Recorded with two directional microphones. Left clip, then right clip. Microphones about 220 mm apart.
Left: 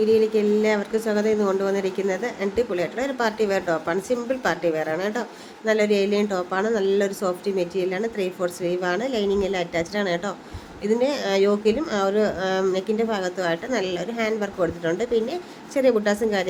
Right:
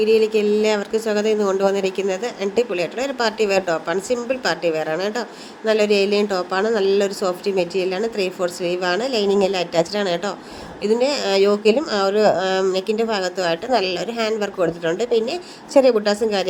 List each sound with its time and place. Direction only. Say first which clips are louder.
0.0 s speech: right 3 dB; 25° right (ahead or behind)